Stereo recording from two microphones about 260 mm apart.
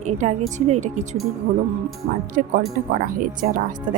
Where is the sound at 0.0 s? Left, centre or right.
Right.